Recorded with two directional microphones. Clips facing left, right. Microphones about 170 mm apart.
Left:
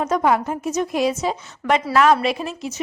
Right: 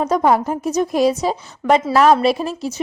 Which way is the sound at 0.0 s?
35° right (ahead or behind).